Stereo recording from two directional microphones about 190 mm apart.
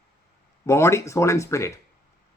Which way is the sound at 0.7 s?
15° left (ahead or behind).